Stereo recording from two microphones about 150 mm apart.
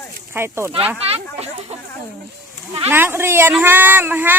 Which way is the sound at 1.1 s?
45° right (ahead or behind).